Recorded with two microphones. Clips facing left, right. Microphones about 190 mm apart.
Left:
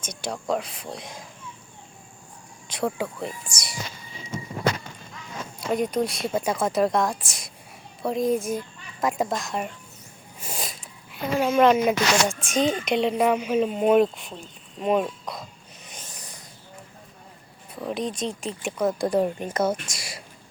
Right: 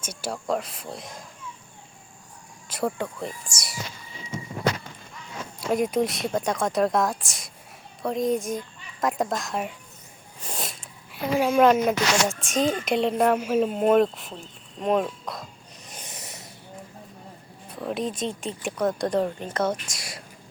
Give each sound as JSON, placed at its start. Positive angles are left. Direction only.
{"t": 0.0, "sound": "speech", "side_deg": -5}
{"t": 2.6, "sound": "speech", "side_deg": -5}
{"t": 5.5, "sound": "speech", "side_deg": -5}
{"t": 16.0, "sound": "snort", "side_deg": -20}
{"t": 17.7, "sound": "speech", "side_deg": 0}
{"t": 19.7, "sound": "a sound", "side_deg": 0}